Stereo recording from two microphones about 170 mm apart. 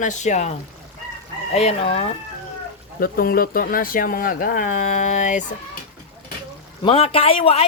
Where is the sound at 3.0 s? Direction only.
60° left (ahead or behind).